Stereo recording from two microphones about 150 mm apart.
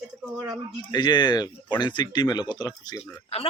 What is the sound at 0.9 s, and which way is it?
Speech, 30° left (ahead or behind).